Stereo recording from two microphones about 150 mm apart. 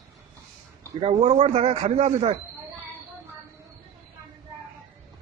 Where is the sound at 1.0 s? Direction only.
40° right (ahead or behind).